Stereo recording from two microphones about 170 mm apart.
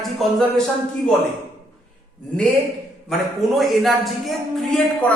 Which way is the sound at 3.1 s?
Centre (ahead or behind).